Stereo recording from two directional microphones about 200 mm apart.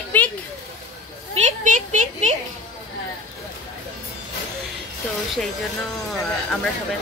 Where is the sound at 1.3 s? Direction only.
35° right (ahead or behind).